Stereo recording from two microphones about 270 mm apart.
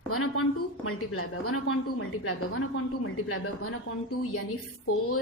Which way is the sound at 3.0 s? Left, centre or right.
Left.